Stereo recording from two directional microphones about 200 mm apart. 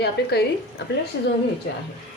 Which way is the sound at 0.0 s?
55° left (ahead or behind).